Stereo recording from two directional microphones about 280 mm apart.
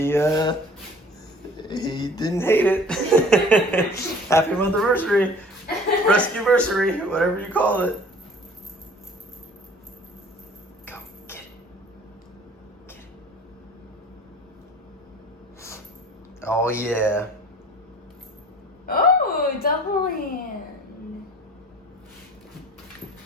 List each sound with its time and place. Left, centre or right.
0.0 s speech: centre
1.5 s a man's voice: centre
10.8 s a sound: centre
16.4 s speech: centre
18.9 s speech: left